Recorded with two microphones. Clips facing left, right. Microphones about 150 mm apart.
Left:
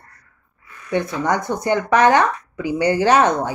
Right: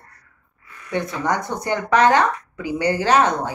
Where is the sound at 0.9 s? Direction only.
15° left (ahead or behind).